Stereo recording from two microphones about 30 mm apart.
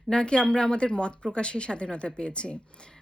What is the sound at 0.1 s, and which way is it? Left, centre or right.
Speech, left.